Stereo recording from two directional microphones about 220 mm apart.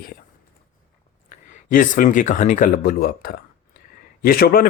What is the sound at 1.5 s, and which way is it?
Speech, 35° left (ahead or behind).